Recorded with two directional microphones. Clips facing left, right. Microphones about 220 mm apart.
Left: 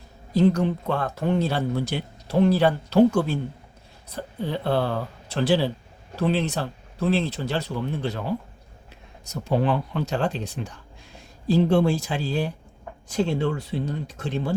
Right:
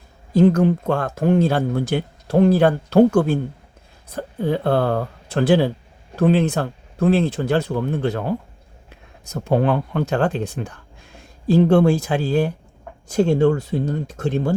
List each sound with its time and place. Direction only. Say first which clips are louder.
0.3 s speech: right 5 dB; 50° right (ahead or behind)